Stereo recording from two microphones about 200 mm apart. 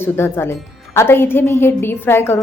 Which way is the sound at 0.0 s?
10° left (ahead or behind).